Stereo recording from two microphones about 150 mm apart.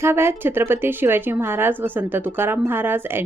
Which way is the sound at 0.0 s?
15° right (ahead or behind).